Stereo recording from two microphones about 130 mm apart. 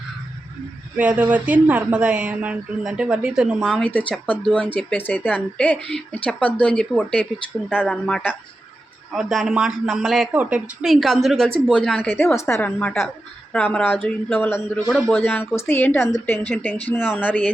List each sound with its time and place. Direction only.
0.9 s speech: 10° right (ahead or behind)
3.7 s speech: 10° left (ahead or behind)
9.1 s a woman's voice: centre (ahead or behind)